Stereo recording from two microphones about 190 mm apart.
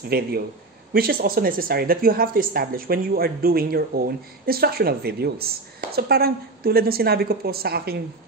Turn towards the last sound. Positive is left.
turn(degrees=-55)  # may be behind; listen again after turning